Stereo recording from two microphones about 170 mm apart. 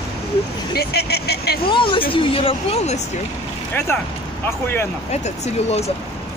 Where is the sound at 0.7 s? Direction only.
70° left (ahead or behind).